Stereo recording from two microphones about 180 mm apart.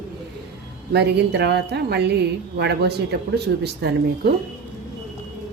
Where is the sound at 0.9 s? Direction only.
65° right (ahead or behind).